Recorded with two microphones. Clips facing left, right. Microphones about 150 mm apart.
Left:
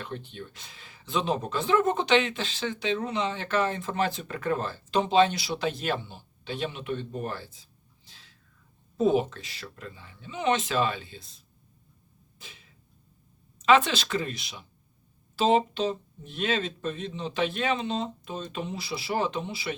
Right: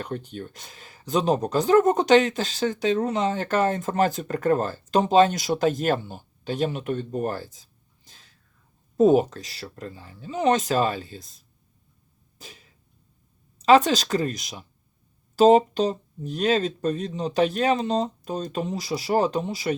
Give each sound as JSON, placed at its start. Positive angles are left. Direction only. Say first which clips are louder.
{"t": 0.0, "sound": "speech", "louder": "right 6 dB", "side_deg": -45}
{"t": 12.4, "sound": "a sound", "louder": "right 5 dB", "side_deg": -40}
{"t": 13.6, "sound": "speech", "louder": "right 5 dB", "side_deg": -35}